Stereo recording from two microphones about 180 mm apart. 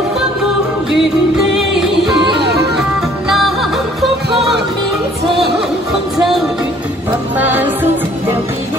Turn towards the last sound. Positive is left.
turn(degrees=-10)  # may be behind; listen again after turning